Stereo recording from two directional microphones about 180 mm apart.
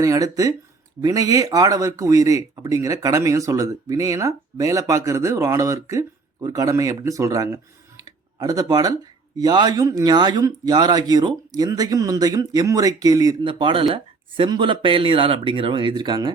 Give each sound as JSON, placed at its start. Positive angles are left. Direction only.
{"t": 0.0, "sound": "speech", "side_deg": -20}